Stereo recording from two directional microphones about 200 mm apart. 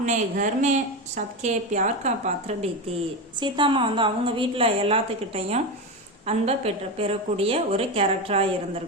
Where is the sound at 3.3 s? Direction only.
25° right (ahead or behind).